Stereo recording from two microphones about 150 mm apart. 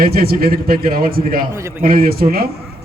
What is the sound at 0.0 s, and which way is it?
A man's voice, 90° right.